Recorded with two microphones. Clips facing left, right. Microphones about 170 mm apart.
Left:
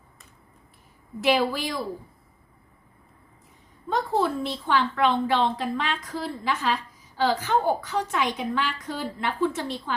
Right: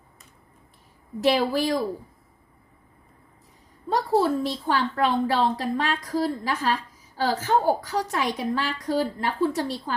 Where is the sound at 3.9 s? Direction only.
40° right (ahead or behind).